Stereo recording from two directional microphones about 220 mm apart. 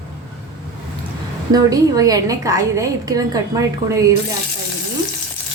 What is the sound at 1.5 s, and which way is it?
A woman's voice, 15° right (ahead or behind).